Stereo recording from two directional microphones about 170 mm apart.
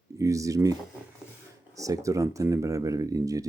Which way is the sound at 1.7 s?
20° right (ahead or behind).